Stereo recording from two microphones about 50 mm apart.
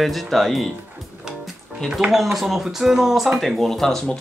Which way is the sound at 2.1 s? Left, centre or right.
Centre.